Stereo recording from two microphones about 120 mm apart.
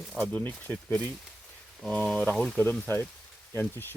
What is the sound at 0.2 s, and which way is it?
Speech, 15° left (ahead or behind).